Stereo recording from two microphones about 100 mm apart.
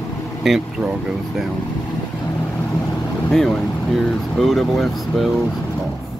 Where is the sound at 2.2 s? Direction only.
30° left (ahead or behind).